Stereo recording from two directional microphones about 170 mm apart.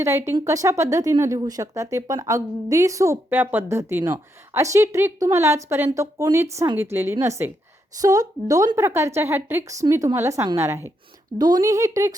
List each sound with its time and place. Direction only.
0.0 s speech: 15° right (ahead or behind)